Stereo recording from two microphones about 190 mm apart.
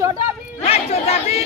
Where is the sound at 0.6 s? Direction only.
30° left (ahead or behind).